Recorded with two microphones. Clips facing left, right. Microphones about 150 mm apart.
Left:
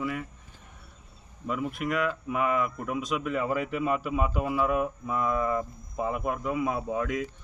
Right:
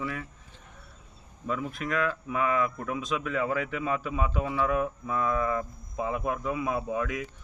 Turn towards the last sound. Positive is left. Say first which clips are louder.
# left 1 dB
turn(degrees=25)  # may be behind; listen again after turning